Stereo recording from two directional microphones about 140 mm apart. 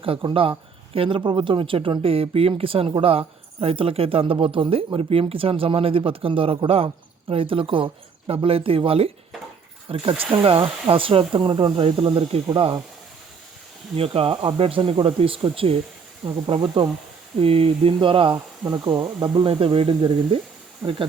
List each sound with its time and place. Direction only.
0.0 s speech: 40° right (ahead or behind)
13.9 s speech: 45° right (ahead or behind)
18.6 s speech: 25° right (ahead or behind)